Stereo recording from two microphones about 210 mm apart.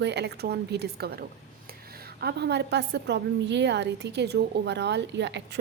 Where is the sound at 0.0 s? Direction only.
55° right (ahead or behind).